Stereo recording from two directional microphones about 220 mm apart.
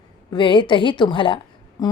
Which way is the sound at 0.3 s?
20° left (ahead or behind).